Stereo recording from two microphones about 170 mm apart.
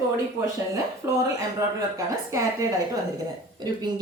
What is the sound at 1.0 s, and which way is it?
Speech, 20° right (ahead or behind).